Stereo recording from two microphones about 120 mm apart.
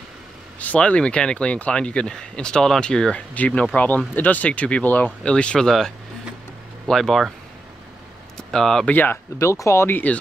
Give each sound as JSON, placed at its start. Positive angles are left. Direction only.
{"t": 0.6, "sound": "speech", "side_deg": 10}
{"t": 8.4, "sound": "speech", "side_deg": 5}
{"t": 8.9, "sound": "speech", "side_deg": 15}